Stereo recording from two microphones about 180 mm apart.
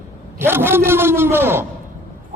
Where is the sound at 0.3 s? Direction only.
10° right (ahead or behind).